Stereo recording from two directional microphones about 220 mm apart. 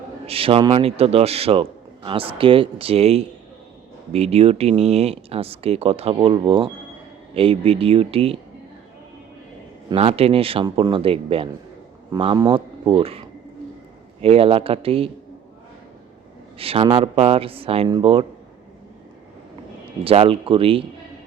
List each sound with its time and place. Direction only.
0.3 s speech: 25° right (ahead or behind)
9.9 s speech: 25° right (ahead or behind)
16.6 s speech: 25° right (ahead or behind)
20.1 s speech: 25° right (ahead or behind)